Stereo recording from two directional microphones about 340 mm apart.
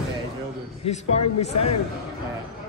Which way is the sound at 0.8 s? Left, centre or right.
Centre.